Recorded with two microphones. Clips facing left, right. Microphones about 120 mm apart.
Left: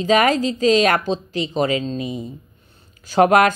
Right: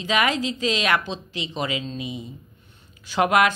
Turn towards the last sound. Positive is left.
turn(degrees=45)  # may be behind; listen again after turning